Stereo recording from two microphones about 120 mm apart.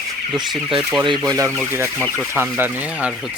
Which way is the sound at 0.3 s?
40° right (ahead or behind).